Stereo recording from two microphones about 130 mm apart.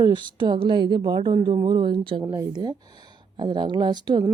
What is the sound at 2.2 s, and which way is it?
Speech, 20° right (ahead or behind).